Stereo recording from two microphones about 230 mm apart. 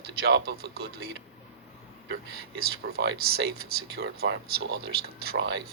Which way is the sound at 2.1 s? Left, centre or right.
Right.